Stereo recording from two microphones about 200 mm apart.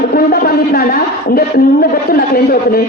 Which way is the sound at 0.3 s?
50° left (ahead or behind).